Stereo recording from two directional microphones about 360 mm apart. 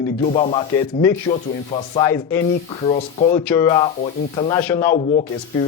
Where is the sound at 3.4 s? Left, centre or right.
Centre.